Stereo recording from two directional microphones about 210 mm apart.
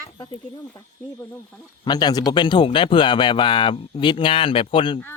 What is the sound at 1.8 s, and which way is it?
Speech, 20° left (ahead or behind).